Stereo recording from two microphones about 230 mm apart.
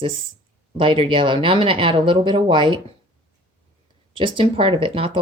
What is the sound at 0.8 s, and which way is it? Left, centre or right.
Speech, right.